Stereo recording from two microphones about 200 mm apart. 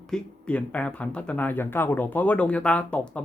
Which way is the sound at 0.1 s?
5° left (ahead or behind).